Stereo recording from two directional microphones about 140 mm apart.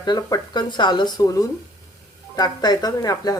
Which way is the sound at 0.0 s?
30° left (ahead or behind).